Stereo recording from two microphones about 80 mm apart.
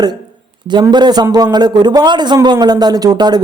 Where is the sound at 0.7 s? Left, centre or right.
Right.